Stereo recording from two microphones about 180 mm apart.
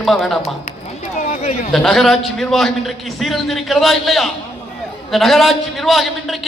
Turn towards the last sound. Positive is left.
turn(degrees=0)  # may be behind; listen again after turning